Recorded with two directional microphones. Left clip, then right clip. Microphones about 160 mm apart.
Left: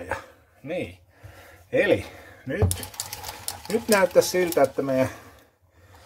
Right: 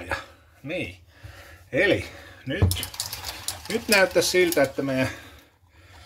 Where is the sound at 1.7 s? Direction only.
40° left (ahead or behind).